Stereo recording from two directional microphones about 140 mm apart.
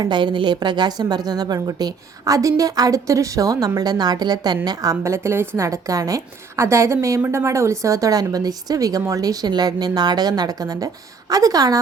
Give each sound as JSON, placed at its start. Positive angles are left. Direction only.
{"t": 0.0, "sound": "a woman's voice", "side_deg": -30}